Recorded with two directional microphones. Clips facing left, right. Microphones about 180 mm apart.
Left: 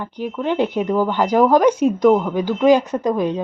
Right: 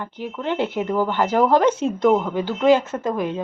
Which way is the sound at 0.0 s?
15° left (ahead or behind).